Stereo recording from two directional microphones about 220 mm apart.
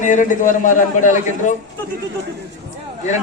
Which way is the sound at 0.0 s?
35° left (ahead or behind).